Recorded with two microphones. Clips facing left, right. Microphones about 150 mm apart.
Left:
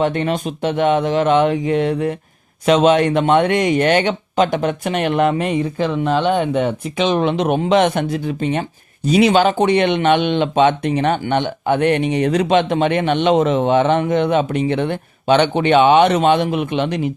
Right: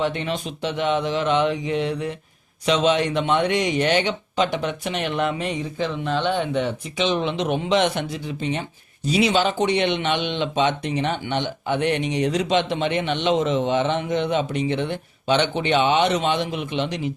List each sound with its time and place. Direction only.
0.0 s speech: 50° left (ahead or behind)